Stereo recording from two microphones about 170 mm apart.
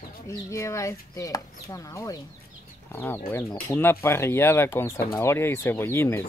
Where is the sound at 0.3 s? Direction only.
15° left (ahead or behind).